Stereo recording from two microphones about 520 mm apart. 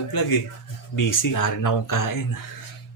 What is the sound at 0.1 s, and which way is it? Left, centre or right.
Speech, left.